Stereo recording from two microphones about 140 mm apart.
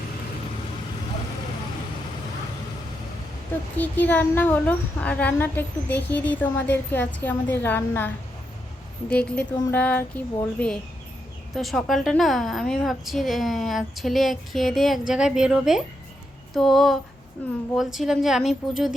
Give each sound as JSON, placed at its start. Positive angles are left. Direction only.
{"t": 3.8, "sound": "a child's voice", "side_deg": 10}